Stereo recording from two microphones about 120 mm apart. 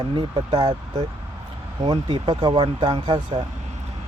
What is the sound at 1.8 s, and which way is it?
Speech, 40° right (ahead or behind).